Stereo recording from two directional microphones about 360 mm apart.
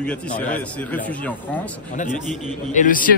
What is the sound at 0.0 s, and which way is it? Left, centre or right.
A man's voice, centre.